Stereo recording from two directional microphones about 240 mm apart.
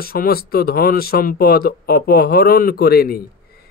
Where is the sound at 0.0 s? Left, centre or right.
Left.